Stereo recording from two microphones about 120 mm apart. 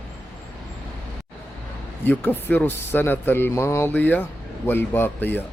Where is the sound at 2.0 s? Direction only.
15° left (ahead or behind).